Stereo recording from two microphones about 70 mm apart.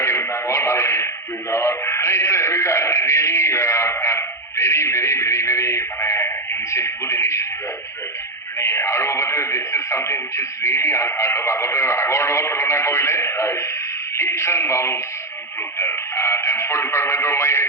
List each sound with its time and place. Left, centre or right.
0.0 s a man's voice: left
8.5 s speech: left
15.8 s radio: left